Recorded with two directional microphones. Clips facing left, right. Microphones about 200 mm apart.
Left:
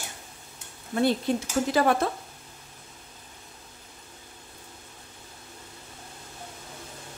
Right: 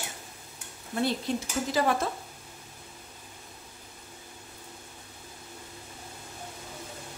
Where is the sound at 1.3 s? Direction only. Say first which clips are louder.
Left 4 dB; 55° left (ahead or behind).